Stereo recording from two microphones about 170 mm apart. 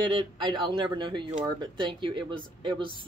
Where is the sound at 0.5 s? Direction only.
30° right (ahead or behind).